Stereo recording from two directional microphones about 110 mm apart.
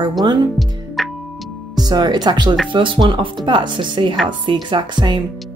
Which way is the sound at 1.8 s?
40° right (ahead or behind).